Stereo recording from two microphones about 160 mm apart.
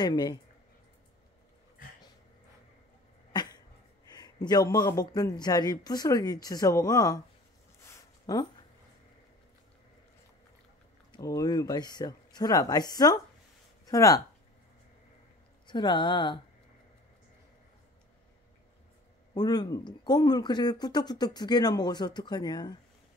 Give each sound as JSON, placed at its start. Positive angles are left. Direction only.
{"t": 0.0, "sound": "speech", "side_deg": 25}
{"t": 4.1, "sound": "speech", "side_deg": 25}
{"t": 7.8, "sound": "a sound", "side_deg": 20}
{"t": 11.1, "sound": "speech", "side_deg": 20}
{"t": 15.6, "sound": "speech", "side_deg": 30}
{"t": 19.3, "sound": "speech", "side_deg": 25}